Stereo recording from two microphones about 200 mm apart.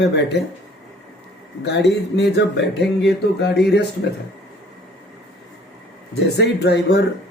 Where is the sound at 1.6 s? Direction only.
55° left (ahead or behind).